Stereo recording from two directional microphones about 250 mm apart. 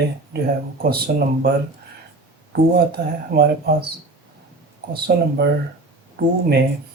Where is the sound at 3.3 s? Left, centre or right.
Right.